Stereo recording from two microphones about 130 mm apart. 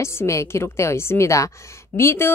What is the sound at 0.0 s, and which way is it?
A man's voice, 20° left (ahead or behind).